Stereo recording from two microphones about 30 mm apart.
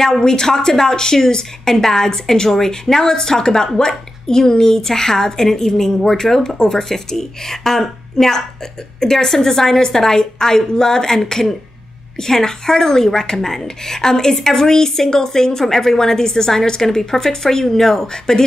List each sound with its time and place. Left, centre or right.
0.0 s a woman's voice: centre
12.2 s a woman's voice: centre